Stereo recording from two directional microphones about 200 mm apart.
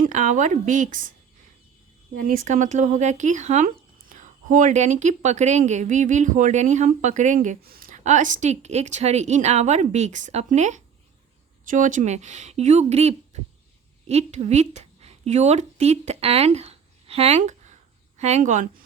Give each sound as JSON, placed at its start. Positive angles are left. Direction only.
{"t": 0.0, "sound": "a woman's voice", "side_deg": -40}
{"t": 2.1, "sound": "a woman's voice", "side_deg": -45}